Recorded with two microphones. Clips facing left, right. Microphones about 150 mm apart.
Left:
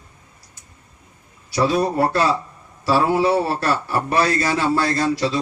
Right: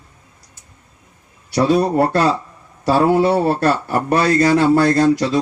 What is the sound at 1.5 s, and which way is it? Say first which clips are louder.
A man's voice: right 4 dB; 55° right (ahead or behind).